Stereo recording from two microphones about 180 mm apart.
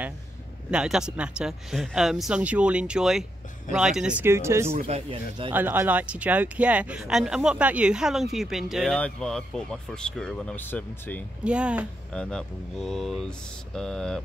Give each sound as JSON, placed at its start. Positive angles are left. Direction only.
{"t": 0.7, "sound": "speech", "side_deg": -5}
{"t": 4.7, "sound": "speech", "side_deg": -35}
{"t": 5.5, "sound": "speech", "side_deg": -10}
{"t": 11.4, "sound": "speech", "side_deg": -5}
{"t": 12.1, "sound": "speech", "side_deg": 5}